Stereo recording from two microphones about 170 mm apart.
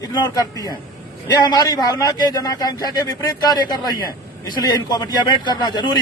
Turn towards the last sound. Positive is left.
turn(degrees=25)  # may be behind; listen again after turning